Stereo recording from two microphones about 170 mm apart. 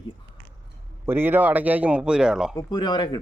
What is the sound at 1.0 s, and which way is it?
Speech, 15° right (ahead or behind).